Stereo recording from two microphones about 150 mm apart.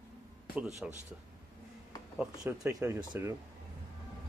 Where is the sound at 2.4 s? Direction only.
20° right (ahead or behind).